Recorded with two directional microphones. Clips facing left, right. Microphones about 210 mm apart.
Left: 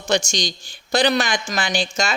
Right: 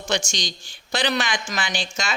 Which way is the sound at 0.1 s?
40° left (ahead or behind).